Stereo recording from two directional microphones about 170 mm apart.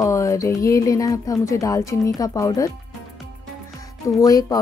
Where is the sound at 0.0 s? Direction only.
20° left (ahead or behind).